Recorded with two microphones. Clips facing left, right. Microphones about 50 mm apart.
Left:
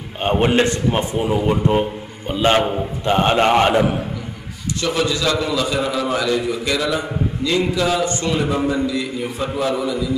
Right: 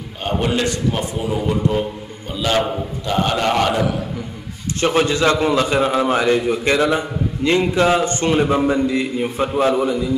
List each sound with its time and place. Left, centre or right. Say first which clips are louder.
0.2 s a man's voice: left 4 dB; left
4.7 s a man's voice: right 4 dB; right